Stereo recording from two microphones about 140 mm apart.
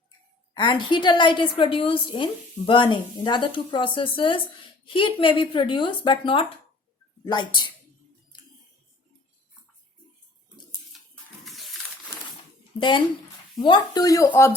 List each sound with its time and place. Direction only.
0.5 s a woman's voice: 35° left (ahead or behind)
11.4 s a sound: centre (ahead or behind)
13.6 s speech: 30° left (ahead or behind)